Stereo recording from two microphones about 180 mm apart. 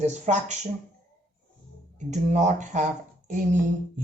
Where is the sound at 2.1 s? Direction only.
40° right (ahead or behind).